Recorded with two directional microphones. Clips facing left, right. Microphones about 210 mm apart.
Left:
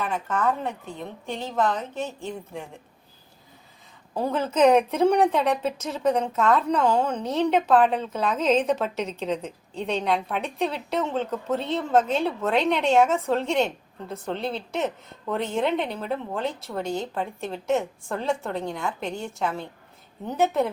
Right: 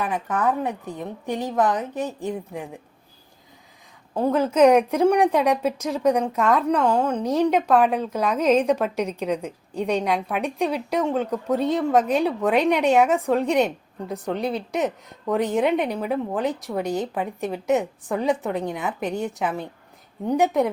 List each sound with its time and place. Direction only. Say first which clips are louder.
0.0 s a woman's voice: right 2 dB; 15° right (ahead or behind)
4.1 s a woman's voice: right 5 dB; 5° right (ahead or behind)